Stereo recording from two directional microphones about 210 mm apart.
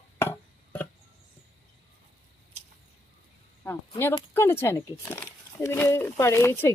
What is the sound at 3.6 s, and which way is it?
Speech, 10° left (ahead or behind).